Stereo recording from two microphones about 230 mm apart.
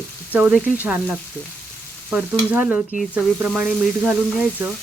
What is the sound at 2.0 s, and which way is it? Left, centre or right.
Speech, centre.